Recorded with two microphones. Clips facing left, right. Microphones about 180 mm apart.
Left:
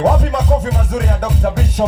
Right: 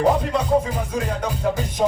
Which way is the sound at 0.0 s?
75° left (ahead or behind).